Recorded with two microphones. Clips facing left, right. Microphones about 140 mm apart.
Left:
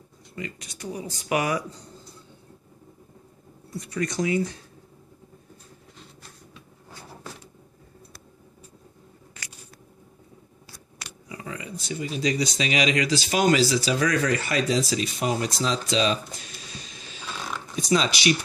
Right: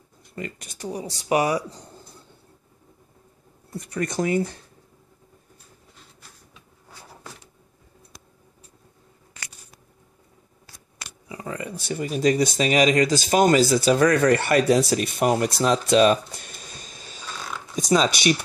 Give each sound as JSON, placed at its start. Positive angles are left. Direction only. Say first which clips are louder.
{"t": 0.4, "sound": "speech", "louder": "right 2 dB", "side_deg": -45}
{"t": 4.0, "sound": "speech", "louder": "right 2 dB", "side_deg": -55}
{"t": 11.4, "sound": "speech", "louder": "right 5 dB", "side_deg": -45}